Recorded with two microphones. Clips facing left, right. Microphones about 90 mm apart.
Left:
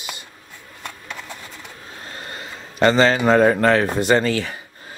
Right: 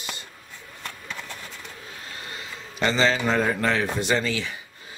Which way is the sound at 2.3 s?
50° left (ahead or behind).